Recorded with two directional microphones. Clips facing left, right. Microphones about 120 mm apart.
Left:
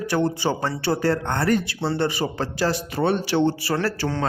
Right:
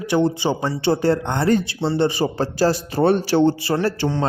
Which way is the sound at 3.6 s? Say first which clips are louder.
Right 3 dB; 20° right (ahead or behind).